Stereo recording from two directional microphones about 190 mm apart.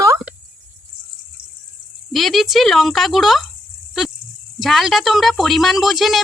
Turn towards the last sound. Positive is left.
turn(degrees=0)  # may be behind; listen again after turning